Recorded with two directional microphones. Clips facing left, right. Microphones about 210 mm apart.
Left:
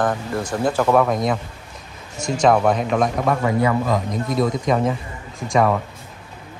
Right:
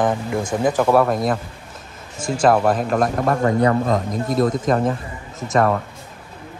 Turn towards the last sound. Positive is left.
turn(degrees=0)  # may be behind; listen again after turning